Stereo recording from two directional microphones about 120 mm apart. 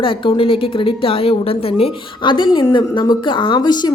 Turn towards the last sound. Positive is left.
turn(degrees=35)  # may be behind; listen again after turning